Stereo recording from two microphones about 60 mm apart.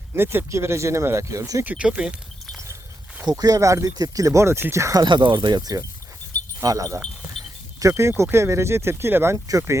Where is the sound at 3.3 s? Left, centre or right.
Right.